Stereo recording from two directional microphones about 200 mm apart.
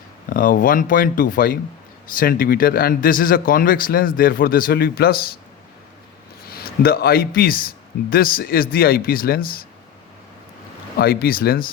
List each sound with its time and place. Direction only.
0.3 s speech: 45° left (ahead or behind)
6.6 s speech: 50° left (ahead or behind)
10.9 s speech: 50° left (ahead or behind)